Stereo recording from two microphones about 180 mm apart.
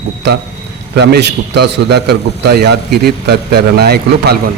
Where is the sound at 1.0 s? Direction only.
65° right (ahead or behind).